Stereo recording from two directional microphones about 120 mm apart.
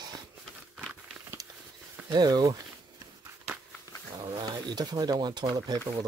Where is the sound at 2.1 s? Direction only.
35° right (ahead or behind).